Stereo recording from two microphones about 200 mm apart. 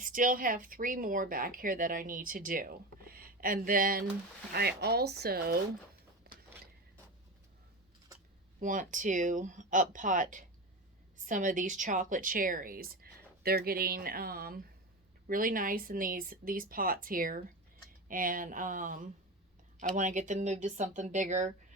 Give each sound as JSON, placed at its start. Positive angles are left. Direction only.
{"t": 0.0, "sound": "speech", "side_deg": -45}
{"t": 6.3, "sound": "a sound", "side_deg": -50}
{"t": 8.6, "sound": "speech", "side_deg": -40}